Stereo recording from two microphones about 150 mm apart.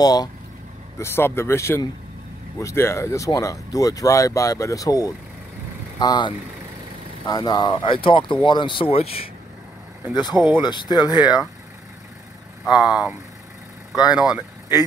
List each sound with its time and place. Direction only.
0.0 s speech: 25° left (ahead or behind); by 9.3 s 40° left (ahead or behind)
10.1 s speech: 30° left (ahead or behind)
12.6 s speech: 5° right (ahead or behind)
13.9 s speech: 25° left (ahead or behind)